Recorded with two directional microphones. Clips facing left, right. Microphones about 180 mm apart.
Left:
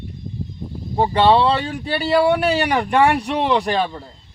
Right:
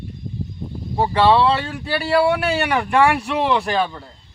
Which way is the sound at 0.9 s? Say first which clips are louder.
Left 1 dB; 25° left (ahead or behind).